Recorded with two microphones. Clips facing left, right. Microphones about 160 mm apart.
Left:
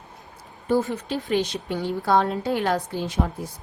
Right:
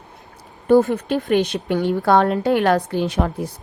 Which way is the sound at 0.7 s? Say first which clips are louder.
Right 8 dB; 60° right (ahead or behind).